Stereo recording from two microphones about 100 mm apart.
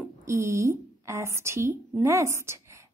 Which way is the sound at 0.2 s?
30° right (ahead or behind).